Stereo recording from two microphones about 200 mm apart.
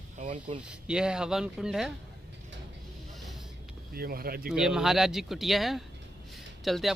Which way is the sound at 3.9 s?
50° right (ahead or behind).